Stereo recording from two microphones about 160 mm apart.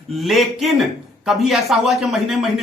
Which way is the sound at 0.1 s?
Centre (ahead or behind).